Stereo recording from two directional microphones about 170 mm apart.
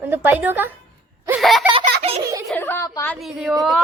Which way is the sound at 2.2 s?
20° right (ahead or behind).